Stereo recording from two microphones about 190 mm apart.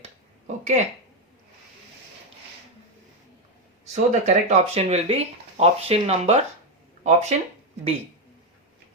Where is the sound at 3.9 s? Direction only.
40° right (ahead or behind).